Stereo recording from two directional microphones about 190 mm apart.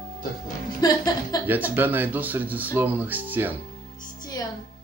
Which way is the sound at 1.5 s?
10° right (ahead or behind).